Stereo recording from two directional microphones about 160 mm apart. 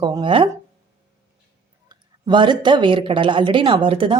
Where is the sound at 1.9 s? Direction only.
30° right (ahead or behind).